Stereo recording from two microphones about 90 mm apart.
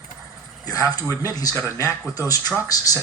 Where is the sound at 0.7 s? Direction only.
45° left (ahead or behind).